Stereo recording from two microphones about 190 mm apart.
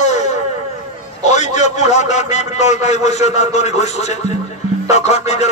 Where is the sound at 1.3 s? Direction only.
40° left (ahead or behind).